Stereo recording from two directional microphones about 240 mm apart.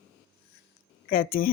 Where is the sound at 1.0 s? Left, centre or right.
Left.